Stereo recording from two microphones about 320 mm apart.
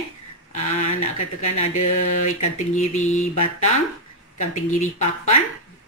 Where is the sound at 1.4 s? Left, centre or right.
Left.